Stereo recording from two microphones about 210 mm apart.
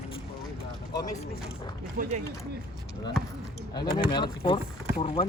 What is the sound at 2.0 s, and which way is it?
Speech, 40° right (ahead or behind).